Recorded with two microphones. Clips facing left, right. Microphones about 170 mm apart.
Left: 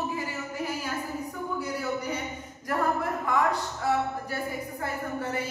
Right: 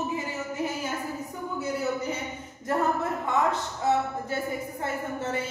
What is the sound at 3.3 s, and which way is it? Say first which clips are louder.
Speech: even; 25° right (ahead or behind).